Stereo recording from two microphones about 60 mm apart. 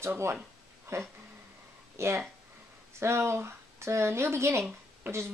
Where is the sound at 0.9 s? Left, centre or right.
Right.